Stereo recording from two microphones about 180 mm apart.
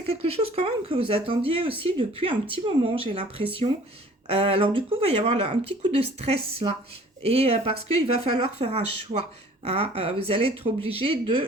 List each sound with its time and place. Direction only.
0.1 s speech: 35° right (ahead or behind)